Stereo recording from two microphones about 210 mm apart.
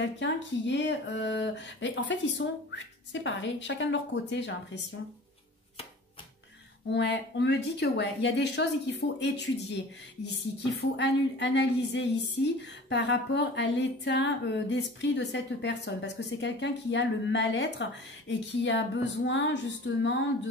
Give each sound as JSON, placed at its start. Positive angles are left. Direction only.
{"t": 0.0, "sound": "speech", "side_deg": 60}
{"t": 6.9, "sound": "speech", "side_deg": 55}